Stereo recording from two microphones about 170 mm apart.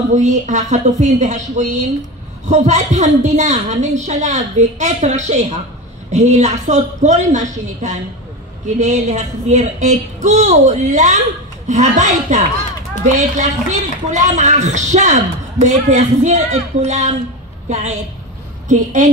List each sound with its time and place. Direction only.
0.1 s a woman's voice: 45° right (ahead or behind)